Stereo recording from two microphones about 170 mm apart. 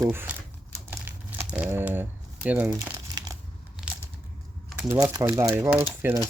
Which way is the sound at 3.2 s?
20° right (ahead or behind).